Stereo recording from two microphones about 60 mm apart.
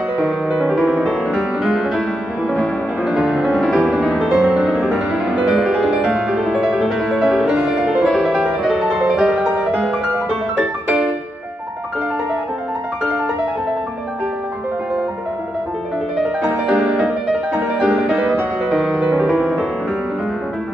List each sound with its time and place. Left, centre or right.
0.6 s music: centre
3.1 s music: centre
8.9 s music: centre
10.6 s music: centre
16.2 s music: centre
18.9 s music: centre
19.3 s music: centre